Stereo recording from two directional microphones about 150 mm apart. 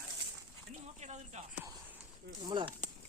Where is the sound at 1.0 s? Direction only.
50° right (ahead or behind).